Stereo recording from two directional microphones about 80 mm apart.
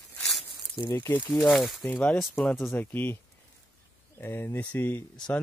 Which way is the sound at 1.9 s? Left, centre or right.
Centre.